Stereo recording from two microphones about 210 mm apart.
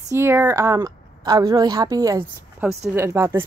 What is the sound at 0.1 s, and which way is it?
Speech, 10° right (ahead or behind).